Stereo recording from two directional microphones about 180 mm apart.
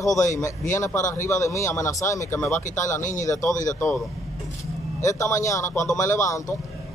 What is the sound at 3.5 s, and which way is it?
Speech, 45° left (ahead or behind).